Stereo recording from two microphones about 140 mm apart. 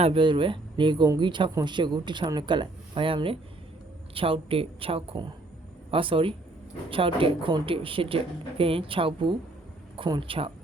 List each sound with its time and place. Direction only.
0.0 s speech: 40° right (ahead or behind)